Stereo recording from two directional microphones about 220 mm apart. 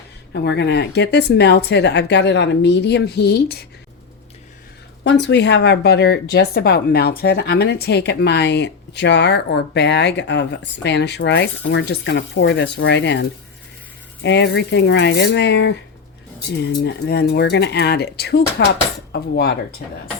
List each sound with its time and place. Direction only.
0.4 s speech: 50° left (ahead or behind)
5.0 s speech: 50° left (ahead or behind)